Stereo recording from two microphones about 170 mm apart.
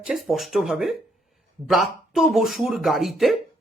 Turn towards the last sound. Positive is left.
turn(degrees=0)  # may be behind; listen again after turning